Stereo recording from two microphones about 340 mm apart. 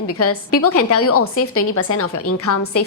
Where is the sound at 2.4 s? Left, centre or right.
Left.